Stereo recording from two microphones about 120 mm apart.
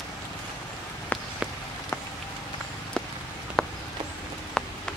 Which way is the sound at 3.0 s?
5° left (ahead or behind).